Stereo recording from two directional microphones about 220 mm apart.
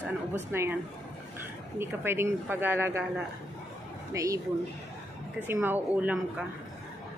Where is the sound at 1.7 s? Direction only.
10° right (ahead or behind).